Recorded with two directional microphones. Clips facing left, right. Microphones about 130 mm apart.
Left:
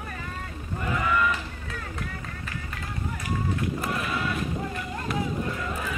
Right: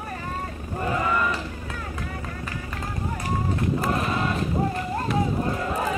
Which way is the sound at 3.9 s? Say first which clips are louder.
Right 4 dB; 35° right (ahead or behind).